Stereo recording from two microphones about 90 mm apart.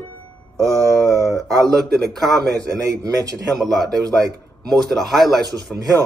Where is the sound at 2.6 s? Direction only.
40° right (ahead or behind).